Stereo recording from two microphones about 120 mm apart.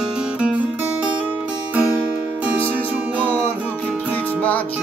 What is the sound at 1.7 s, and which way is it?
Music, 10° right (ahead or behind).